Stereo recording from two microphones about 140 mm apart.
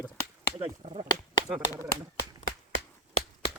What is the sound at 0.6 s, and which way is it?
Speech, 45° right (ahead or behind).